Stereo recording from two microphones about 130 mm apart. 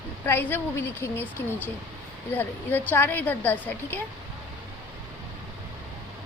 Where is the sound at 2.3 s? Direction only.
15° left (ahead or behind).